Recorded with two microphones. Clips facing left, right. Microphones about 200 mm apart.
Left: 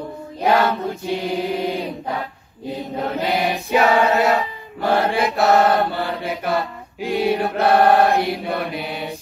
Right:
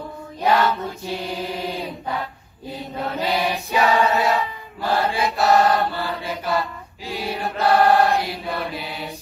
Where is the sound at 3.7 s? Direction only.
60° left (ahead or behind).